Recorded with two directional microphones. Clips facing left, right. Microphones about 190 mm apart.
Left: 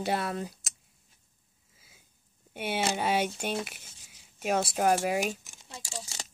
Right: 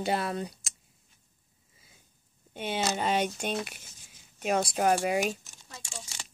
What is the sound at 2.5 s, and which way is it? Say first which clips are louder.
Speech: even; 10° left (ahead or behind).